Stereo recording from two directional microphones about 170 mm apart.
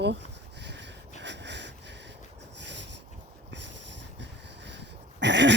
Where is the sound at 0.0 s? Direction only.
90° right.